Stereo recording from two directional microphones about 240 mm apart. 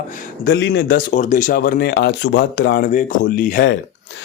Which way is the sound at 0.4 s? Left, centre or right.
Left.